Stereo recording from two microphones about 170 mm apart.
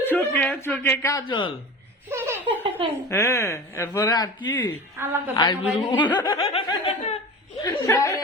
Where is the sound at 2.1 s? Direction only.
15° right (ahead or behind).